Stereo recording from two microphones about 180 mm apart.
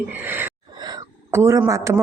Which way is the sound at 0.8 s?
20° right (ahead or behind).